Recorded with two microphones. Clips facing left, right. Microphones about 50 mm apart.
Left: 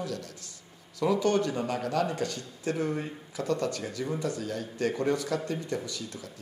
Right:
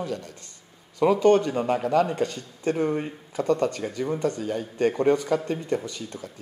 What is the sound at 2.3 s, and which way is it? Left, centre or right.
Speech, right.